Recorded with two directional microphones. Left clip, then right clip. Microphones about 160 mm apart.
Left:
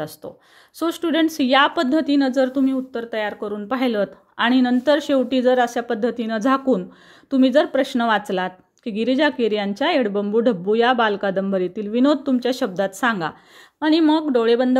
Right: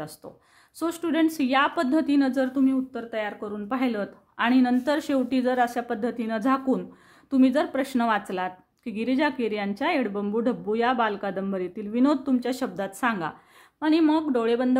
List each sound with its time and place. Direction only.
0.7 s a woman's voice: 25° left (ahead or behind)